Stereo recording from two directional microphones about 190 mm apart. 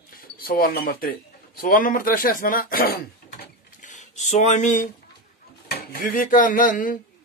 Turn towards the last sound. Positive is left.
turn(degrees=45)  # may be behind; listen again after turning